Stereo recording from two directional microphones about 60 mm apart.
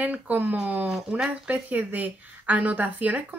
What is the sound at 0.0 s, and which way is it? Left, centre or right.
A woman's voice, right.